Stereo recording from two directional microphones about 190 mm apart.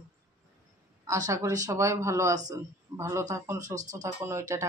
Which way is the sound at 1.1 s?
15° right (ahead or behind).